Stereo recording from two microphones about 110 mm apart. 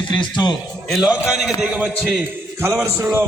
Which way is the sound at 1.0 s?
5° right (ahead or behind).